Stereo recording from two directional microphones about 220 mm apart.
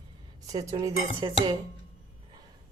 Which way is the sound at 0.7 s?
20° right (ahead or behind).